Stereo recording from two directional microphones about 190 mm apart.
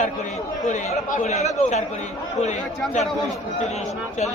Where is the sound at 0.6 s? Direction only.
40° left (ahead or behind).